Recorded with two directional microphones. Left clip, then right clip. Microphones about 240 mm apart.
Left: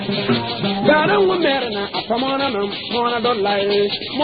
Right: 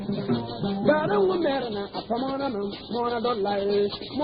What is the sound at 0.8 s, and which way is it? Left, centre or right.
Music, left.